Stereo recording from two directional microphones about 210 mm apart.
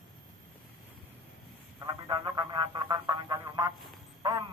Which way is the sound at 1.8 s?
20° right (ahead or behind).